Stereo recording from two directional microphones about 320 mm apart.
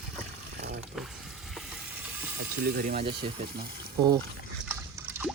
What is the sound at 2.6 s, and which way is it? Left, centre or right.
Speech, right.